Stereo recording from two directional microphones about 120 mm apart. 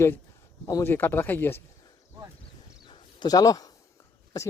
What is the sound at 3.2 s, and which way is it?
Speech, 30° left (ahead or behind).